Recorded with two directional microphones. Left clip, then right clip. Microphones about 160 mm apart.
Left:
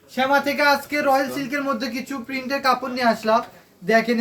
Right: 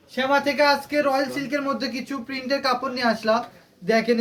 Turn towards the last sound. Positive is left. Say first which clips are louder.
# left 2 dB
turn(degrees=-10)  # may be behind; listen again after turning